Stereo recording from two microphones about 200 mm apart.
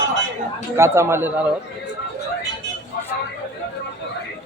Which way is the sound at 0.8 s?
15° right (ahead or behind).